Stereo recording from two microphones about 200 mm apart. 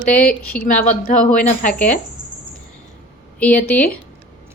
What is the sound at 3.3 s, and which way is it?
Speech, 5° left (ahead or behind).